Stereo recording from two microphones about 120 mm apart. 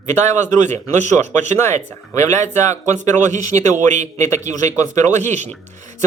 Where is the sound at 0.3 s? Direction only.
80° right.